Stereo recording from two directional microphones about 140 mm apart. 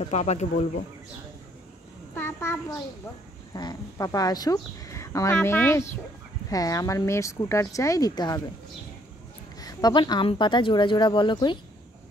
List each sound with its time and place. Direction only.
0.1 s speech: 55° left (ahead or behind)
2.1 s child singing: 15° left (ahead or behind)
3.5 s a woman's voice: 30° left (ahead or behind)
9.6 s speech: 30° left (ahead or behind)